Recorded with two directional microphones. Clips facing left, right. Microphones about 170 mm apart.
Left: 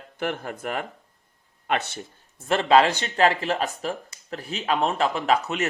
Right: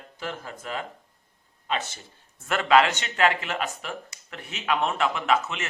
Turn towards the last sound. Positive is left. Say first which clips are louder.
# left 2 dB
turn(degrees=40)  # may be behind; listen again after turning